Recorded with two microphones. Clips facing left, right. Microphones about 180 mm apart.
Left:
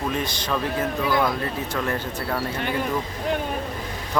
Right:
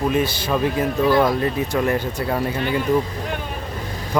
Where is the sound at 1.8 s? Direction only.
15° right (ahead or behind).